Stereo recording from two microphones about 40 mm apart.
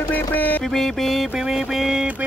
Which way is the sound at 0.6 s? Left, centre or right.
Centre.